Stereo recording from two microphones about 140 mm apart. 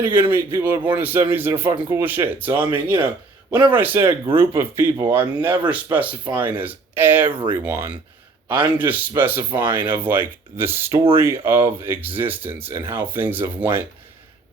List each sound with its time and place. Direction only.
0.1 s speech: 15° right (ahead or behind)
3.7 s speech: 15° right (ahead or behind)
3.9 s speech: 40° right (ahead or behind)
4.4 s speech: 20° right (ahead or behind)
7.3 s speech: 35° right (ahead or behind)
7.5 s speech: 15° right (ahead or behind)